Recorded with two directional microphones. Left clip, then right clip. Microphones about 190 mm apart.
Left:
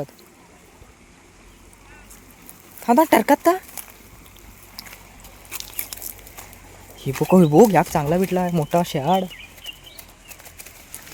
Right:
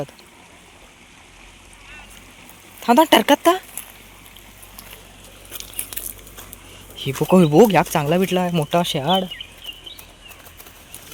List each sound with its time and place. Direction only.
2.8 s speech: 5° left (ahead or behind)
6.9 s speech: 15° left (ahead or behind)